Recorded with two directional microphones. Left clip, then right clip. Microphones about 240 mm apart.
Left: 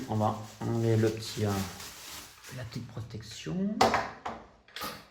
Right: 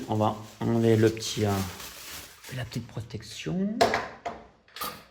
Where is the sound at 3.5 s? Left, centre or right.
Right.